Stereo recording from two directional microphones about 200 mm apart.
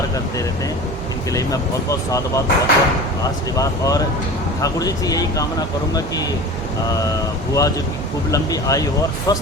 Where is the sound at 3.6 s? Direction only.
15° left (ahead or behind).